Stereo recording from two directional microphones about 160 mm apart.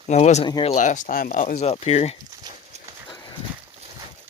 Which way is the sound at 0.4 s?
30° left (ahead or behind).